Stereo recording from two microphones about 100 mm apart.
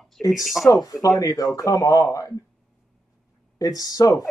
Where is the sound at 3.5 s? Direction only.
40° left (ahead or behind).